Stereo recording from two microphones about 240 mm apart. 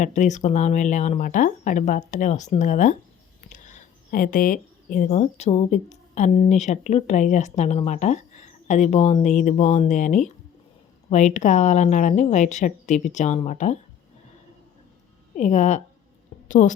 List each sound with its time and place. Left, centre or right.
0.0 s a woman's voice: left
15.4 s a woman's voice: left